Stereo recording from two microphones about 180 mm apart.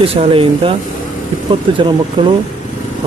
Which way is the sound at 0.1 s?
30° right (ahead or behind).